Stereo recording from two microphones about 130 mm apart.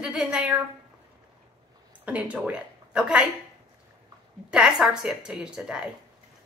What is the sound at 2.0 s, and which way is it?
Speech, 10° right (ahead or behind).